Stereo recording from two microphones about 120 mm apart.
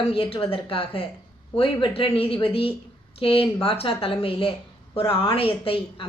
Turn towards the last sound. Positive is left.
turn(degrees=50)  # may be behind; listen again after turning